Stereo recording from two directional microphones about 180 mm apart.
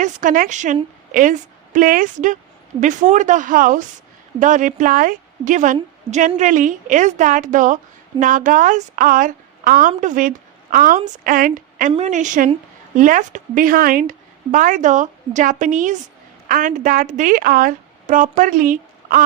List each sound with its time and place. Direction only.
0.0 s a woman's voice: 45° right (ahead or behind)